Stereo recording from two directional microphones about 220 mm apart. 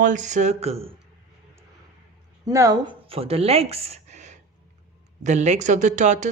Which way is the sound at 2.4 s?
15° right (ahead or behind).